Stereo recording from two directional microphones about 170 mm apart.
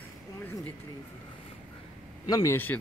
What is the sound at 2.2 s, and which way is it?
Speech, 20° left (ahead or behind).